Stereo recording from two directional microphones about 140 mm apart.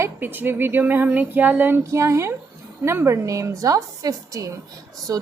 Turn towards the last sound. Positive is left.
turn(degrees=-25)  # may be behind; listen again after turning